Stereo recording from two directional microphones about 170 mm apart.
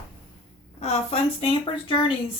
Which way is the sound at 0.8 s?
40° left (ahead or behind).